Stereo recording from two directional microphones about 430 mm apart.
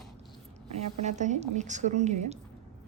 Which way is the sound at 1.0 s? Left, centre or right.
Centre.